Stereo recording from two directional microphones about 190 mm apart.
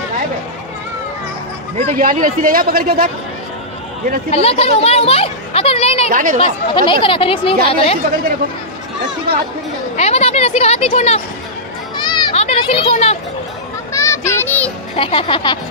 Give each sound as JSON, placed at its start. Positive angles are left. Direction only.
{"t": 2.0, "sound": "speech", "side_deg": -45}
{"t": 4.3, "sound": "speech", "side_deg": 30}
{"t": 6.0, "sound": "speech", "side_deg": -45}
{"t": 6.7, "sound": "speech", "side_deg": 25}
{"t": 9.9, "sound": "speech", "side_deg": 35}
{"t": 12.1, "sound": "children playing", "side_deg": 25}
{"t": 13.9, "sound": "a sound", "side_deg": 15}
{"t": 15.0, "sound": "speech", "side_deg": 30}